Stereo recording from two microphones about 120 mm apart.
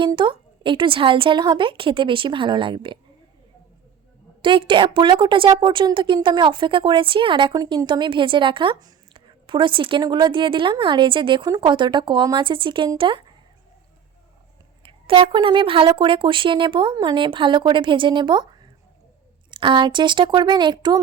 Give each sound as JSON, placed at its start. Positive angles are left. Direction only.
{"t": 0.0, "sound": "speech", "side_deg": -40}
{"t": 4.4, "sound": "speech", "side_deg": -45}
{"t": 14.8, "sound": "speech", "side_deg": -45}
{"t": 19.5, "sound": "speech", "side_deg": -40}